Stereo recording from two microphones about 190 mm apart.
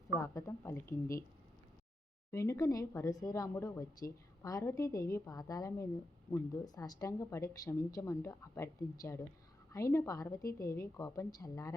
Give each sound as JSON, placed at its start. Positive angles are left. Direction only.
{"t": 0.2, "sound": "speech", "side_deg": 15}
{"t": 2.3, "sound": "speech", "side_deg": 15}